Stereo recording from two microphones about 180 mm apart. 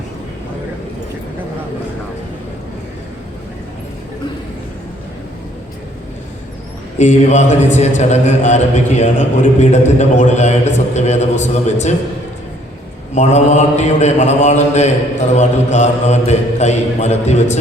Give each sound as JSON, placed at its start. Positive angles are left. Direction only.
{"t": 7.0, "sound": "mantra", "side_deg": 40}
{"t": 13.1, "sound": "mantra", "side_deg": 40}